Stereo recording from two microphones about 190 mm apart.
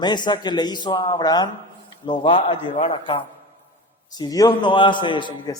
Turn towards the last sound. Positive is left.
turn(degrees=25)  # may be behind; listen again after turning